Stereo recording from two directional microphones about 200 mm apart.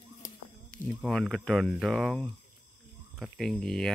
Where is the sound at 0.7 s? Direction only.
Centre (ahead or behind).